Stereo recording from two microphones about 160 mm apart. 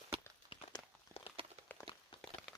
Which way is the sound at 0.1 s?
35° right (ahead or behind).